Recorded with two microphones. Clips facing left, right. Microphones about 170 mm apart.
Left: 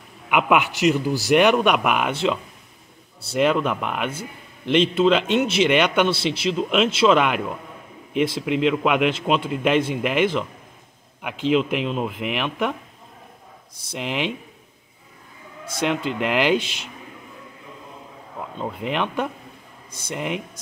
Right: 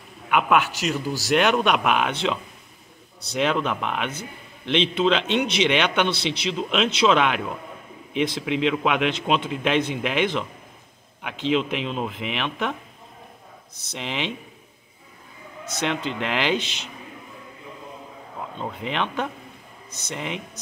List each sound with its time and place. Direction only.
0.3 s a man's voice: 15° left (ahead or behind)
13.8 s speech: 5° left (ahead or behind)
15.6 s speech: 10° left (ahead or behind)
18.6 s speech: 5° left (ahead or behind)